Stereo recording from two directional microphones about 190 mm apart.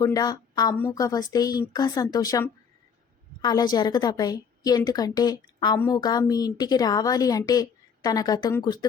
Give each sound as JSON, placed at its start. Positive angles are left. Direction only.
{"t": 0.0, "sound": "a woman's voice", "side_deg": 20}